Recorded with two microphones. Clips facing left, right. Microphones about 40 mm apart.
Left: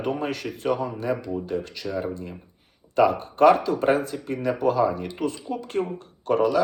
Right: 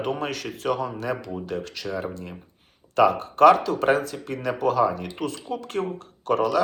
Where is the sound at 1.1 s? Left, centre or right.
Right.